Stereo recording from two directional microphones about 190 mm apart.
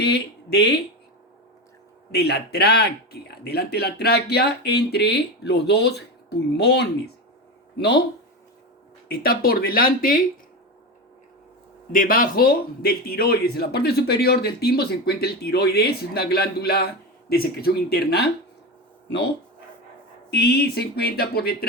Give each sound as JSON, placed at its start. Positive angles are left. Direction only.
{"t": 0.0, "sound": "speech", "side_deg": 60}
{"t": 2.1, "sound": "a man's voice", "side_deg": 55}
{"t": 9.0, "sound": "speech", "side_deg": 50}
{"t": 11.9, "sound": "a man's voice", "side_deg": 50}
{"t": 20.3, "sound": "a man's voice", "side_deg": 60}